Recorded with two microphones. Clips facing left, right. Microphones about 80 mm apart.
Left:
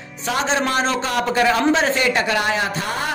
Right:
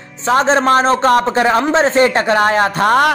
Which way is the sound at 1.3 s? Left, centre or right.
Right.